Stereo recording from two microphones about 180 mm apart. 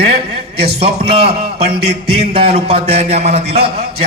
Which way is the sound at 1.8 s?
30° right (ahead or behind).